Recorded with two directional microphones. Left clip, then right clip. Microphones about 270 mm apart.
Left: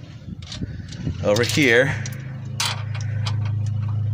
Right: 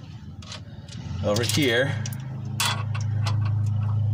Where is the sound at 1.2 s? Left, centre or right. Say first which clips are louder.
Left 5 dB; left.